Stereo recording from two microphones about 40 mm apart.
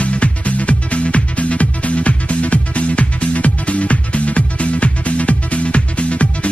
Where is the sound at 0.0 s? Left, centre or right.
Left.